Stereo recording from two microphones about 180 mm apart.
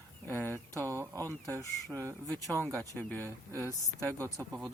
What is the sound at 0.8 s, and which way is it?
Speech, 15° right (ahead or behind).